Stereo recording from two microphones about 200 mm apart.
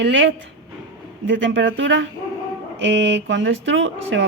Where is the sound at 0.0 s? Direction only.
65° right (ahead or behind).